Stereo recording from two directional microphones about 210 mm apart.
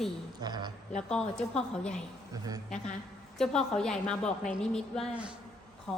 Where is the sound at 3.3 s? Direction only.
5° left (ahead or behind).